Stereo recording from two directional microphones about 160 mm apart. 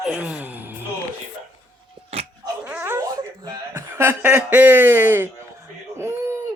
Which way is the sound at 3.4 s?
25° right (ahead or behind).